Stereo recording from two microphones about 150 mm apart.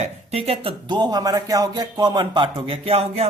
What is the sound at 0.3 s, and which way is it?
A man's voice, 40° right (ahead or behind).